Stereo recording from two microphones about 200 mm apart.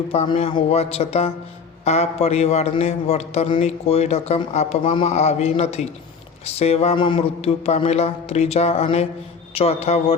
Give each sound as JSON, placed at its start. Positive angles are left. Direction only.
{"t": 0.1, "sound": "a man's voice", "side_deg": 30}